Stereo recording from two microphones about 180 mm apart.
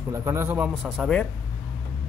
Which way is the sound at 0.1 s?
20° right (ahead or behind).